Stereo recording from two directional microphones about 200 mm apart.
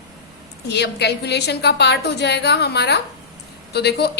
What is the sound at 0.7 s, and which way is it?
A woman's voice, 55° left (ahead or behind).